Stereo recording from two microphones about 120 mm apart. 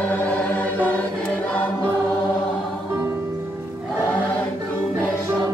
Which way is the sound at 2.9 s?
20° right (ahead or behind).